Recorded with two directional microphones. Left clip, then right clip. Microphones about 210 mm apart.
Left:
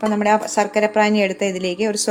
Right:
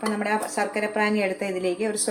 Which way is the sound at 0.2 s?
50° left (ahead or behind).